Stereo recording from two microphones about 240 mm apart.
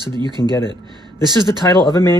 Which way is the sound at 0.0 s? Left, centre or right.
Centre.